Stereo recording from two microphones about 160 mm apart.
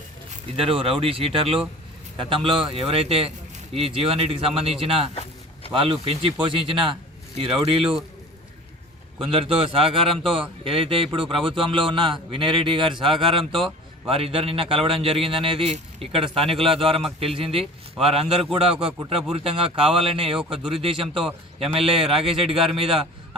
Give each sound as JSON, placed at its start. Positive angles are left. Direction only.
{"t": 0.5, "sound": "speech", "side_deg": -35}
{"t": 9.2, "sound": "speech", "side_deg": -35}